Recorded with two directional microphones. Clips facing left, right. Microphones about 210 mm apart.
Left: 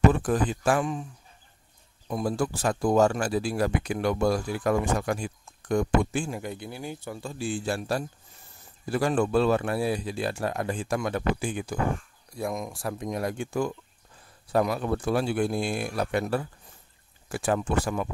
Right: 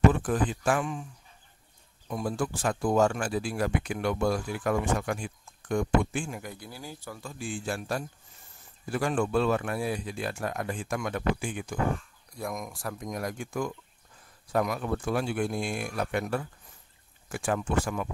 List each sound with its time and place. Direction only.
0.1 s speech: 40° left (ahead or behind)
2.0 s speech: 35° left (ahead or behind)